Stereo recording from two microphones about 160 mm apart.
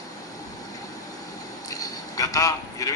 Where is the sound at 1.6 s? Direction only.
20° left (ahead or behind).